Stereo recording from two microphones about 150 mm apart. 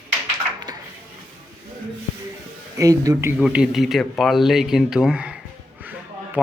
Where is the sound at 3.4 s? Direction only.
5° right (ahead or behind).